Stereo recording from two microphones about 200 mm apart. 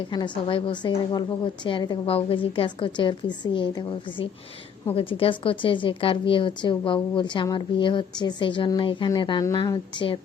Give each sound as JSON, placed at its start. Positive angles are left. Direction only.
{"t": 0.1, "sound": "a woman's voice", "side_deg": 25}